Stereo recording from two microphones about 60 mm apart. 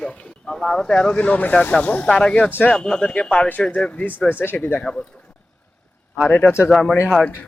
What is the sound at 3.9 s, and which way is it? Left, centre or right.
Speech, left.